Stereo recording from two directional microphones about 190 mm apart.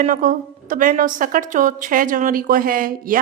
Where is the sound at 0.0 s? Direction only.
45° right (ahead or behind).